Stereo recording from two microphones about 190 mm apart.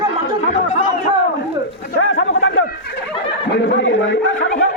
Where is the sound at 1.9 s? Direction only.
85° left.